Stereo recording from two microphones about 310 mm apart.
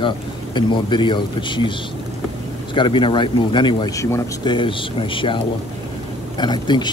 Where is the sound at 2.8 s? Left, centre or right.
Centre.